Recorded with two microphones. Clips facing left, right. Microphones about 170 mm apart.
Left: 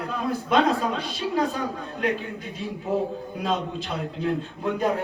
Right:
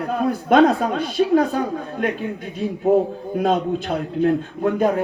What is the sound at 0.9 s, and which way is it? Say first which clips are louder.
Speech: right 9 dB; 55° right (ahead or behind).